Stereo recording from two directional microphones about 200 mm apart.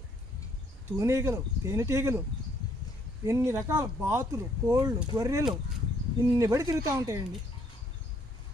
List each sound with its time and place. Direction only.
0.8 s speech: 10° right (ahead or behind)
3.3 s speech: 15° right (ahead or behind)